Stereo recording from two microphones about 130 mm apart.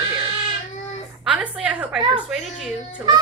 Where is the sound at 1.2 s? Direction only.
10° right (ahead or behind).